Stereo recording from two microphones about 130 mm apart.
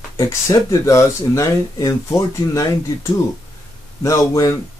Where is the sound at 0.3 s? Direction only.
25° left (ahead or behind).